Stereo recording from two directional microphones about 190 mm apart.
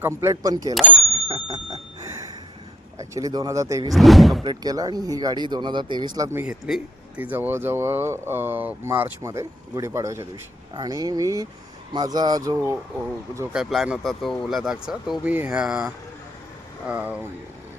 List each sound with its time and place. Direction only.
0.0 s speech: 15° right (ahead or behind)
0.9 s bicycle bell: 30° right (ahead or behind)
2.0 s a sound: 15° right (ahead or behind)
3.0 s speech: 15° right (ahead or behind)
3.9 s speech: centre (ahead or behind)
4.4 s speech: 20° right (ahead or behind)
13.5 s speech: centre (ahead or behind)